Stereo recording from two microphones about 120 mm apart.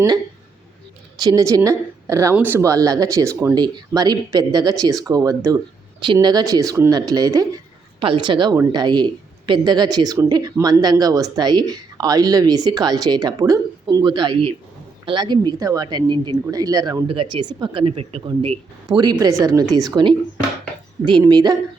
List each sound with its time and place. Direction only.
1.2 s speech: 30° right (ahead or behind)
2.3 s speech: 15° right (ahead or behind); by 17.0 s 30° right (ahead or behind)
17.2 s speech: 45° right (ahead or behind)
18.9 s speech: 35° right (ahead or behind)
21.1 s speech: 40° right (ahead or behind)